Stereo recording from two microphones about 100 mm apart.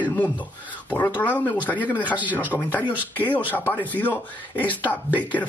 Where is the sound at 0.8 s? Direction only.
15° left (ahead or behind).